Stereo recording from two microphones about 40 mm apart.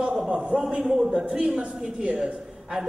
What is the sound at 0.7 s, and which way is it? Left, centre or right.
A man's voice, centre.